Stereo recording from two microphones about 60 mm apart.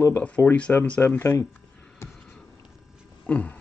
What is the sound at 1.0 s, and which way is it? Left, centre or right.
Speech, left.